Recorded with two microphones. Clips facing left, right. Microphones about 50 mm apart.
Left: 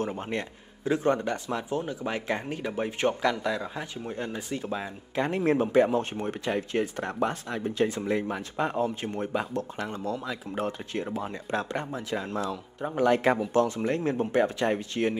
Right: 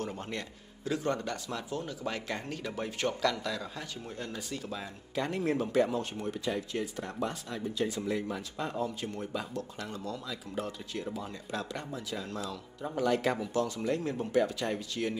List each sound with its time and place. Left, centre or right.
0.0 s speech: left